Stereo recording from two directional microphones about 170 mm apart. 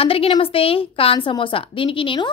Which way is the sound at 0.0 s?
35° left (ahead or behind).